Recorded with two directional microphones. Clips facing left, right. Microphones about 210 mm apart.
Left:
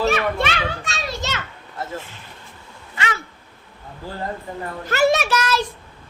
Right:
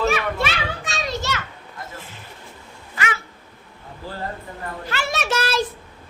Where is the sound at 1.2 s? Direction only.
20° left (ahead or behind).